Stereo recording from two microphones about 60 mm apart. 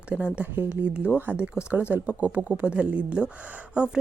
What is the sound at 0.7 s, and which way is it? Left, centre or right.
A woman's voice, centre.